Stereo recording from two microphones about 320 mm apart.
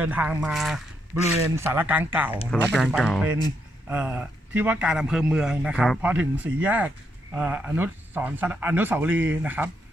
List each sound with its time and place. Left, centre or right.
0.0 s a man's voice: centre